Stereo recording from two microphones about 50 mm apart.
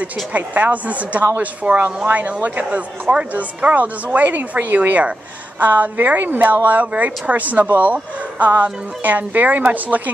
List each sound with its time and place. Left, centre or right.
0.0 s speech: right